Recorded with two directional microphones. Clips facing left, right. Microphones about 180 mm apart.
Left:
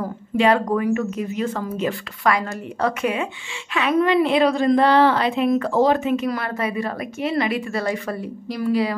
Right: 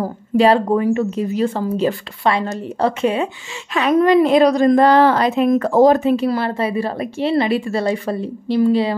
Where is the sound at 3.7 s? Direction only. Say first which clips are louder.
Right 5 dB; 40° right (ahead or behind).